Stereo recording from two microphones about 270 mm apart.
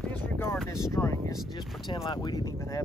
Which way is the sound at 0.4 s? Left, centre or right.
Centre.